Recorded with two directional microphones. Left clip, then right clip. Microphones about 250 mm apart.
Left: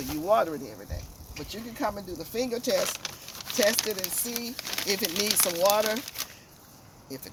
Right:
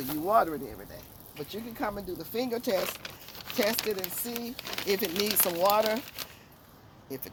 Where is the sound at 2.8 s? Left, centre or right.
Centre.